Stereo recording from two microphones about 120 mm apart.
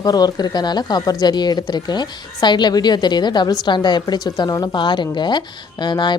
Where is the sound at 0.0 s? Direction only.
35° left (ahead or behind).